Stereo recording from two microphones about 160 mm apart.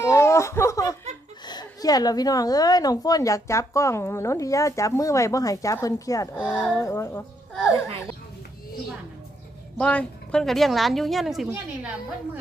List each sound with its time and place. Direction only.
0.0 s a sound: 20° left (ahead or behind)
1.5 s a woman's voice: 25° left (ahead or behind)
9.7 s a woman's voice: 10° left (ahead or behind)